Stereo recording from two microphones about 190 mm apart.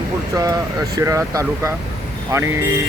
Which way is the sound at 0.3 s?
20° right (ahead or behind).